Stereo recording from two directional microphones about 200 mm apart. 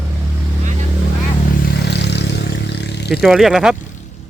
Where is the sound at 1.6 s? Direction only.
60° left (ahead or behind).